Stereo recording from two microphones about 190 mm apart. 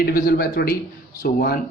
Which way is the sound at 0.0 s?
50° left (ahead or behind).